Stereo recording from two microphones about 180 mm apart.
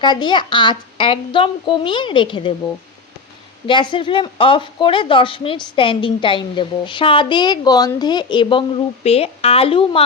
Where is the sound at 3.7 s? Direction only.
25° left (ahead or behind).